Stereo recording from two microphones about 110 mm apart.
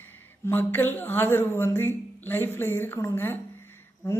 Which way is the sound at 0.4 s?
20° left (ahead or behind).